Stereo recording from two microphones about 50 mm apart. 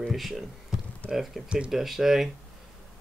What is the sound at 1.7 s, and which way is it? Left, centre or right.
Speech, centre.